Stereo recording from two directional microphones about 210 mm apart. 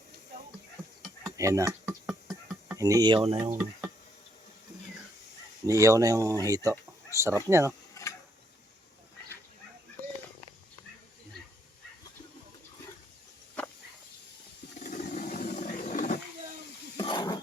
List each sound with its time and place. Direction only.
1.2 s a sound: 15° right (ahead or behind)
1.9 s music: 5° right (ahead or behind)
2.7 s speech: 15° right (ahead or behind)
3.5 s speech: 5° right (ahead or behind)
5.6 s speech: 15° right (ahead or behind)
14.8 s a sound: 35° left (ahead or behind)
17.2 s dog: 20° left (ahead or behind)